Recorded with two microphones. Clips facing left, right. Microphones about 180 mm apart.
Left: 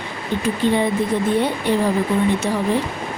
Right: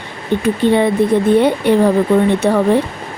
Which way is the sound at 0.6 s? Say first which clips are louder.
Right 6 dB; 60° right (ahead or behind).